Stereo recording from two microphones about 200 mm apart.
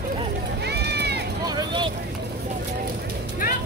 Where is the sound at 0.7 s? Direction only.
55° right (ahead or behind).